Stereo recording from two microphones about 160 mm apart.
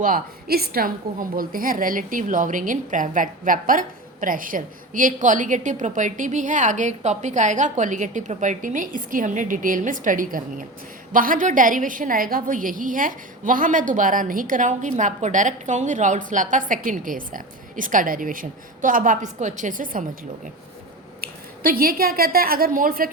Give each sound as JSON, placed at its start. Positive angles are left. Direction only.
{"t": 0.0, "sound": "a woman's voice", "side_deg": -65}
{"t": 21.2, "sound": "a woman's voice", "side_deg": -65}